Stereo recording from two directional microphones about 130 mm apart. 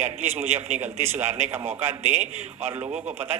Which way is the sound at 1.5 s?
20° right (ahead or behind).